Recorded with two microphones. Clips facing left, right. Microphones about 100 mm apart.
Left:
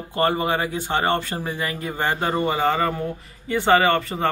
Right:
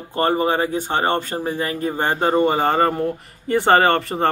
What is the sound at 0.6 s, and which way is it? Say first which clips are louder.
Speech: right 2 dB; 40° right (ahead or behind).